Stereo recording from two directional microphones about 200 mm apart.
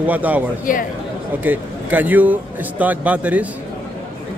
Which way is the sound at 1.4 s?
10° right (ahead or behind).